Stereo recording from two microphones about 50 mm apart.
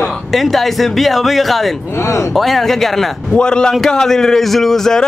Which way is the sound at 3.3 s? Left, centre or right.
Centre.